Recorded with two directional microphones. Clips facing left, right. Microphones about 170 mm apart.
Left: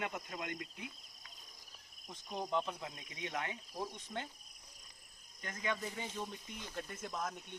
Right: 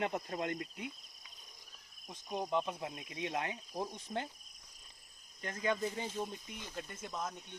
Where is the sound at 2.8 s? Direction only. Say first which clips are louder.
Right 5 dB; 25° right (ahead or behind).